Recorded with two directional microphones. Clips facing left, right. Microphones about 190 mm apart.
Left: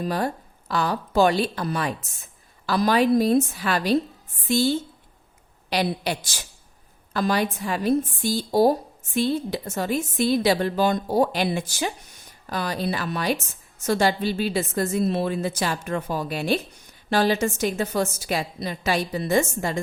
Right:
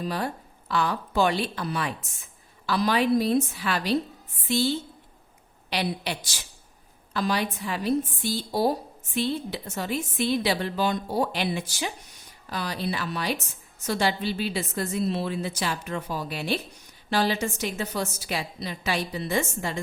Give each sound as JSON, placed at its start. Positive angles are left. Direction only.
{"t": 0.0, "sound": "a woman's voice", "side_deg": 45}
{"t": 5.7, "sound": "a woman's voice", "side_deg": 45}